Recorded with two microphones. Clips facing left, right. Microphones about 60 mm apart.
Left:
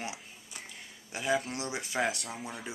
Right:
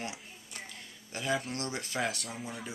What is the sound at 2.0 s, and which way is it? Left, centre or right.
Speech, centre.